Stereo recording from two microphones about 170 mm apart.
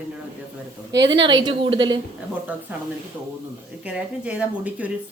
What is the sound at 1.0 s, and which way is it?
A woman's voice, 25° right (ahead or behind).